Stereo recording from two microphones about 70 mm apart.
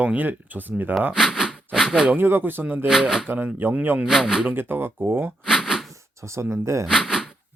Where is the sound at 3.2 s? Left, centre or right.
Right.